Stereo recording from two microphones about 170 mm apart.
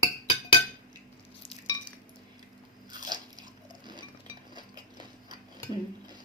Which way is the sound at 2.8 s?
25° right (ahead or behind).